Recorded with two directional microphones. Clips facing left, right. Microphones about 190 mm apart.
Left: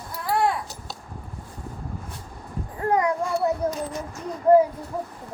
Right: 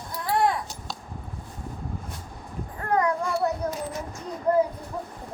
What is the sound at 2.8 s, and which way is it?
Child singing, 15° left (ahead or behind).